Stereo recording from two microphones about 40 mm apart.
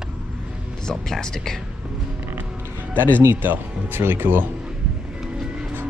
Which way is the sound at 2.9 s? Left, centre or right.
Right.